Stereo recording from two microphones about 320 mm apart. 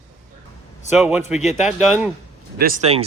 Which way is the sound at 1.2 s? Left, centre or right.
Left.